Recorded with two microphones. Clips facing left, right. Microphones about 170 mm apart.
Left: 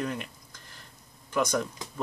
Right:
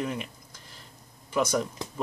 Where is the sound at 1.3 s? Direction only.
10° right (ahead or behind).